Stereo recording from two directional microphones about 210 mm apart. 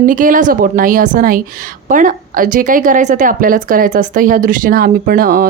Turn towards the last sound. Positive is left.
turn(degrees=-45)  # may be behind; listen again after turning